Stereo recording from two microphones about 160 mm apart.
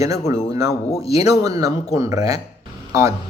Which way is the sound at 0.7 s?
40° left (ahead or behind).